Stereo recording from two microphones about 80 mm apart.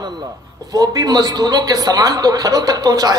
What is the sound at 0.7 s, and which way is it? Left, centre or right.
A man's voice, right.